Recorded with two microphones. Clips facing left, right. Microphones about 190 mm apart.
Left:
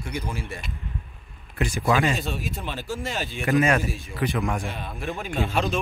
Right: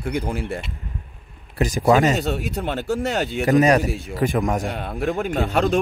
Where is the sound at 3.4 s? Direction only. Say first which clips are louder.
Right 5 dB; 40° right (ahead or behind).